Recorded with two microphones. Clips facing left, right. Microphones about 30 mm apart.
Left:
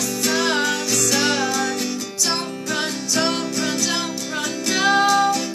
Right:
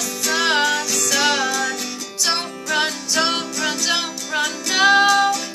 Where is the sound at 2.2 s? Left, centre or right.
Right.